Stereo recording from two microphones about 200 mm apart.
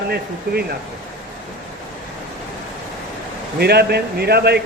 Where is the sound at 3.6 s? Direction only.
55° right (ahead or behind).